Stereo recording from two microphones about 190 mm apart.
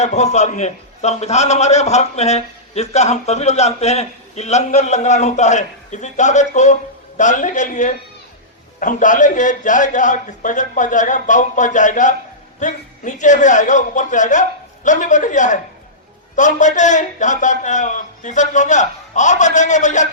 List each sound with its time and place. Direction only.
0.0 s a man's voice: 35° left (ahead or behind)